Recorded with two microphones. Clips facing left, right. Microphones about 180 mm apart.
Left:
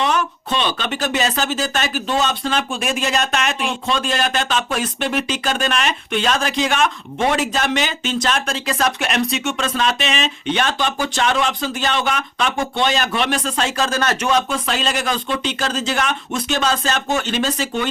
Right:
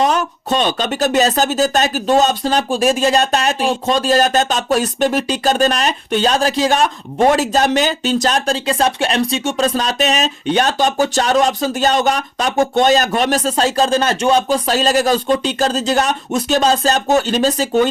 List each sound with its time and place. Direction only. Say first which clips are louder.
0.0 s speech: right 4 dB; 40° right (ahead or behind)